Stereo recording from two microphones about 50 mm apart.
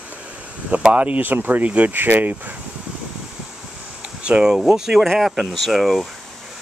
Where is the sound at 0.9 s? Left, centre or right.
Right.